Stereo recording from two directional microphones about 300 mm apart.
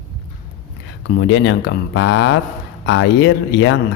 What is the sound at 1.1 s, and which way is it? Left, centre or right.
Speech, left.